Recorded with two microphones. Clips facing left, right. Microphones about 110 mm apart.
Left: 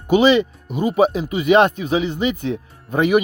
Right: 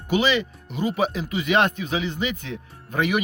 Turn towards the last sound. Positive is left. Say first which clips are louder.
# left 7 dB
turn(degrees=20)  # may be behind; listen again after turning